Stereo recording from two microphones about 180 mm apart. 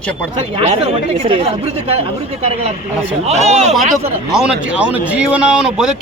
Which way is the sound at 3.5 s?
40° right (ahead or behind).